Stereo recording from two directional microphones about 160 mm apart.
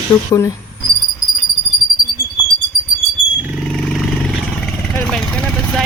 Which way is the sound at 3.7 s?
Centre (ahead or behind).